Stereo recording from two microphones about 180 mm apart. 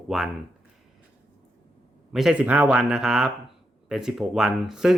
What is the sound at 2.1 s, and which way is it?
Speech, 5° right (ahead or behind).